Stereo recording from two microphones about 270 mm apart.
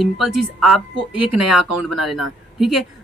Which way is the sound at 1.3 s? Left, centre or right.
Centre.